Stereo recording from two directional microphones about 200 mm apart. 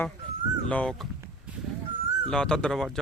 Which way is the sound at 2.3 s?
5° left (ahead or behind).